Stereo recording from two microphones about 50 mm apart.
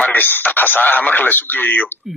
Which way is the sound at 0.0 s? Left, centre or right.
Left.